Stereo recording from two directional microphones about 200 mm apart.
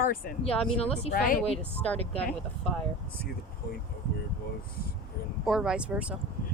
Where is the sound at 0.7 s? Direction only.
30° left (ahead or behind).